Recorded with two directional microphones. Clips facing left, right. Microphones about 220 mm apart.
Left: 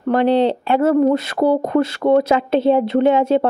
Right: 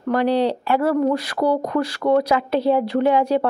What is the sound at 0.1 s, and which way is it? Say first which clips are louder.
Speech: left 4 dB; 25° left (ahead or behind).